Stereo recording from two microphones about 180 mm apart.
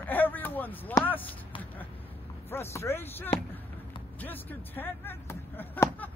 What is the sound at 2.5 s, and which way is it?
Speech, 15° left (ahead or behind).